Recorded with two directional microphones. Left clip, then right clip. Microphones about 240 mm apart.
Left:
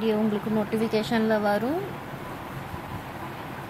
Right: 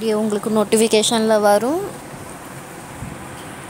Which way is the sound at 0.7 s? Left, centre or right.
Right.